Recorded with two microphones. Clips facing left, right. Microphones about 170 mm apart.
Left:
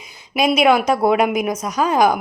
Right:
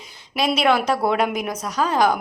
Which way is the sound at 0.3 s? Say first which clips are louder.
Left 4 dB; 15° left (ahead or behind).